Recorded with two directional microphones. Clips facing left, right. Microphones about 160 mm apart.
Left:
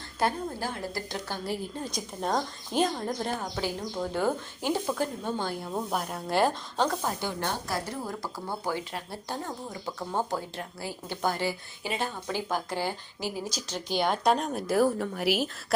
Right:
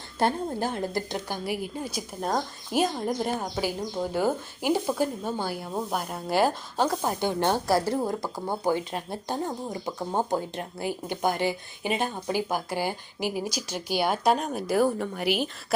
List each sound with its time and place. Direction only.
0.2 s speech: 25° right (ahead or behind); by 6.9 s 5° right (ahead or behind)
7.0 s speech: 20° right (ahead or behind)
8.2 s speech: 20° right (ahead or behind); by 15.4 s centre (ahead or behind)